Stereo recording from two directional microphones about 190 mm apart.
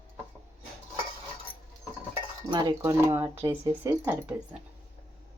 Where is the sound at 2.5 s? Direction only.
20° right (ahead or behind).